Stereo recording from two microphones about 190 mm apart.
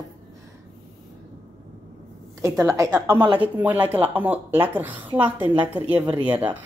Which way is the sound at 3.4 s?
10° right (ahead or behind).